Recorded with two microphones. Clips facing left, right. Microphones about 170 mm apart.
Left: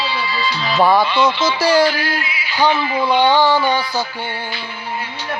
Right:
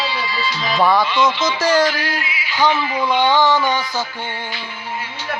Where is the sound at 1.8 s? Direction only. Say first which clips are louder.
Left 2 dB; 30° left (ahead or behind).